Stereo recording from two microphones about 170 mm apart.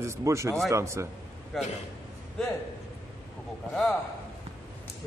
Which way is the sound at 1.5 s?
Centre (ahead or behind).